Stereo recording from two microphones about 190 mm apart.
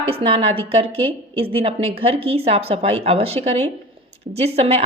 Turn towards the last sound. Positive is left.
turn(degrees=-35)  # may be behind; listen again after turning